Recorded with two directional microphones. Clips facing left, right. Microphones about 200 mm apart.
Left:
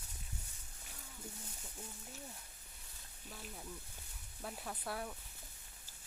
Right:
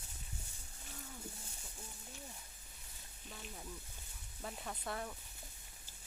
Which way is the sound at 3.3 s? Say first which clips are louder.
Even; centre (ahead or behind).